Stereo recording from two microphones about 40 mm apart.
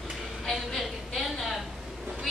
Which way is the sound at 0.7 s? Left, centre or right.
Centre.